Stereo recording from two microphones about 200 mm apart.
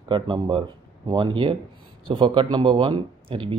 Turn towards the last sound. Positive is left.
turn(degrees=-25)  # may be behind; listen again after turning